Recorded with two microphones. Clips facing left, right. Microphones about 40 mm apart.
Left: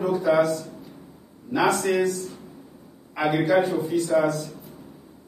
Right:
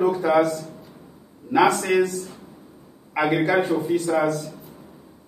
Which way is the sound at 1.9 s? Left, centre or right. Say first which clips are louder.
Right 3 dB; right.